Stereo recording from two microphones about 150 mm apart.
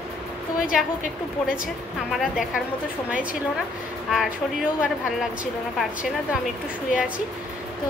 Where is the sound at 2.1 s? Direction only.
5° right (ahead or behind).